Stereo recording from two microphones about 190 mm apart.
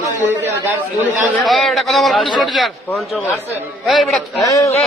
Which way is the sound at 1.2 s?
Centre (ahead or behind).